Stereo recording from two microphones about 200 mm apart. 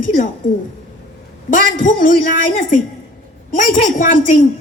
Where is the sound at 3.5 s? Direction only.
40° left (ahead or behind).